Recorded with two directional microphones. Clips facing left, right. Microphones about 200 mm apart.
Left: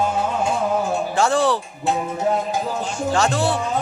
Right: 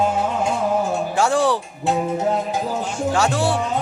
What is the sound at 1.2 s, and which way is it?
Music, 10° right (ahead or behind).